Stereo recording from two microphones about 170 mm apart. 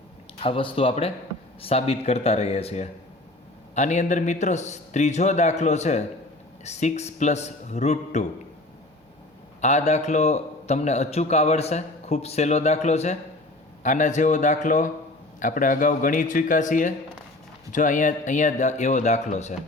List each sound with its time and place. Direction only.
0.3 s a man's voice: 30° left (ahead or behind)
9.6 s a man's voice: 45° left (ahead or behind)